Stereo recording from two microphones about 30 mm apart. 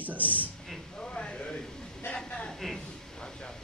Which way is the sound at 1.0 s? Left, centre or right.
Left.